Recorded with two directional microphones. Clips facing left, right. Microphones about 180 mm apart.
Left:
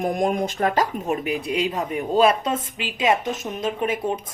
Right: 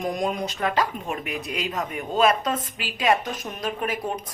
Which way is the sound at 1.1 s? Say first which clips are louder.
Left 6 dB; 35° left (ahead or behind).